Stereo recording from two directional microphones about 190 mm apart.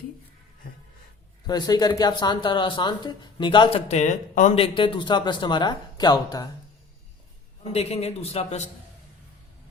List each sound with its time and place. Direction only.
1.5 s speech: 20° left (ahead or behind)
7.7 s a man's voice: 35° left (ahead or behind)